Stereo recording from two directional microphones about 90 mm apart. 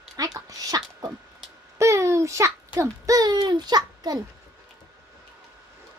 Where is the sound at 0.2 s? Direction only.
45° right (ahead or behind).